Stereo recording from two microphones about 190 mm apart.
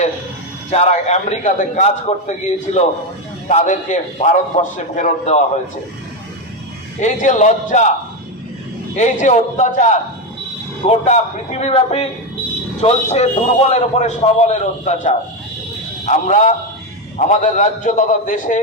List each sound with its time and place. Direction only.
0.7 s a man's voice: 35° left (ahead or behind)
7.0 s a man's voice: 40° left (ahead or behind)
9.0 s a man's voice: 40° left (ahead or behind)